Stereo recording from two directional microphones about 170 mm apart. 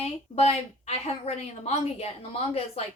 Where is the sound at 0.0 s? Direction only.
35° left (ahead or behind).